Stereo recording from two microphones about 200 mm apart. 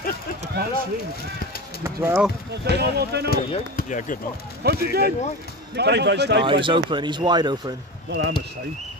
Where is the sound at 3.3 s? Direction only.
45° left (ahead or behind).